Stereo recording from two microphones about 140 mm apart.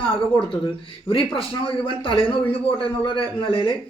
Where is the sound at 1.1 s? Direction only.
40° left (ahead or behind).